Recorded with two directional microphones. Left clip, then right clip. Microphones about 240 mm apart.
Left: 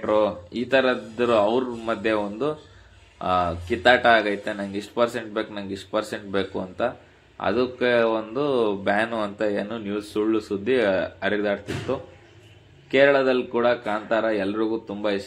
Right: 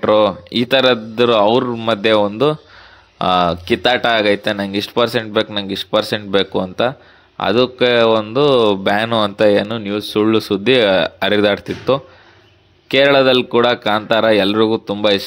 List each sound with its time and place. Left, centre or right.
0.0 s speech: right